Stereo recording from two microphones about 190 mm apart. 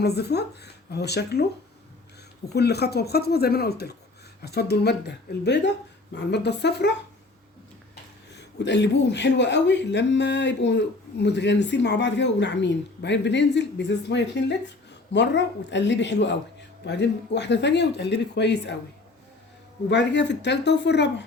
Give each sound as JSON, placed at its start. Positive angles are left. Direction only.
{"t": 0.0, "sound": "a man's voice", "side_deg": 60}
{"t": 2.5, "sound": "a man's voice", "side_deg": 60}
{"t": 8.5, "sound": "a man's voice", "side_deg": 65}
{"t": 19.9, "sound": "a man's voice", "side_deg": 65}